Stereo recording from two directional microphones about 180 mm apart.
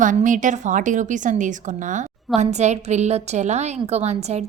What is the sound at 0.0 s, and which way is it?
A woman's voice, 45° right (ahead or behind).